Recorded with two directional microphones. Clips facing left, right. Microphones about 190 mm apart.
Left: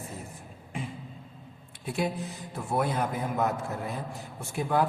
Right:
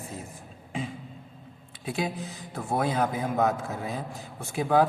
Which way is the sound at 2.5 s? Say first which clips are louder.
Right 2 dB; 90° right.